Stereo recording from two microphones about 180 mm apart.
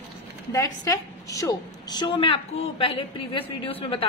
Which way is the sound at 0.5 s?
20° left (ahead or behind).